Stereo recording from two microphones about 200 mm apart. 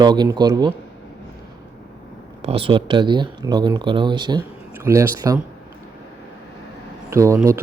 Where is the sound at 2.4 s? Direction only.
30° right (ahead or behind).